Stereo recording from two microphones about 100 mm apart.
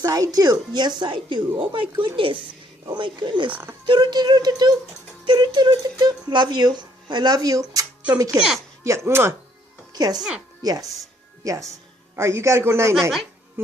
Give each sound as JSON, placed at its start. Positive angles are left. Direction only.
{"t": 0.0, "sound": "speech", "side_deg": -40}
{"t": 3.5, "sound": "a man's voice", "side_deg": -25}
{"t": 3.8, "sound": "a child's voice", "side_deg": -50}
{"t": 8.4, "sound": "speech", "side_deg": -5}
{"t": 9.0, "sound": "a man's voice", "side_deg": -25}
{"t": 9.9, "sound": "a child's voice", "side_deg": -40}
{"t": 13.0, "sound": "speech", "side_deg": 0}